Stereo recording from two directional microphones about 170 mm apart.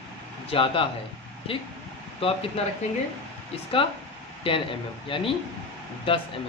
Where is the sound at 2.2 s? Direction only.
35° left (ahead or behind).